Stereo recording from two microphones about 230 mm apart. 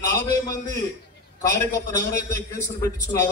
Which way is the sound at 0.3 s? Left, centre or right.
Centre.